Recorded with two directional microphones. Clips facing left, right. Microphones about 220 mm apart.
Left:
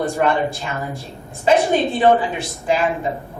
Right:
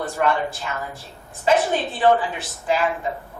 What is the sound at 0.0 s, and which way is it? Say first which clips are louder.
A woman's voice: left 4 dB; 15° left (ahead or behind).